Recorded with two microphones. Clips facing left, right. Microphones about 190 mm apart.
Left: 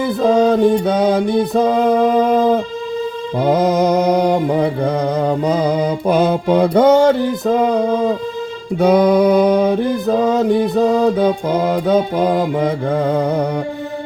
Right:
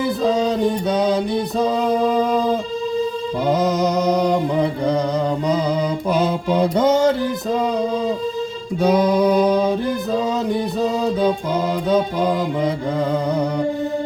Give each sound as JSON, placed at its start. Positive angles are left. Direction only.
{"t": 0.0, "sound": "music", "side_deg": 55}
{"t": 3.4, "sound": "mantra", "side_deg": 55}
{"t": 8.8, "sound": "music", "side_deg": 60}